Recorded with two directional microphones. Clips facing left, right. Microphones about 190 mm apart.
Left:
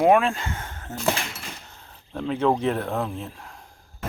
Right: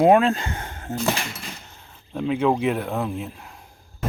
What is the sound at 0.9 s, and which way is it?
Speech, 35° right (ahead or behind).